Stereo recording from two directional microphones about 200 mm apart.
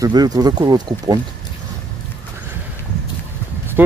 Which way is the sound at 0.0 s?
20° right (ahead or behind).